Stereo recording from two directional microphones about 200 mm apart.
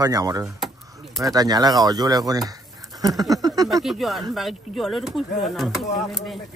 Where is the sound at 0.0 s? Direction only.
20° right (ahead or behind).